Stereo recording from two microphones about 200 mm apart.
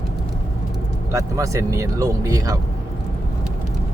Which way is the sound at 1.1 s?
15° right (ahead or behind).